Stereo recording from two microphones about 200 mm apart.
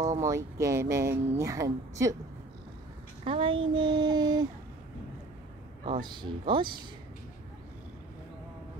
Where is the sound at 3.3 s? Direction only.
25° right (ahead or behind).